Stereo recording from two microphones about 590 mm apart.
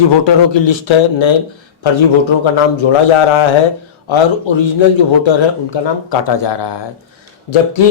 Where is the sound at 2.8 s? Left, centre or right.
Left.